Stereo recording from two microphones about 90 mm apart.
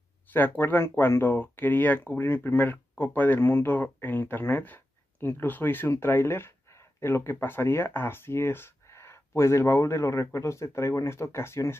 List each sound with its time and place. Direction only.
0.3 s speech: 20° left (ahead or behind)